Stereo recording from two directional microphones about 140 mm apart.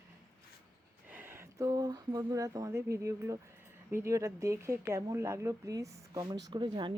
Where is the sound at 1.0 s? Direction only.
15° right (ahead or behind).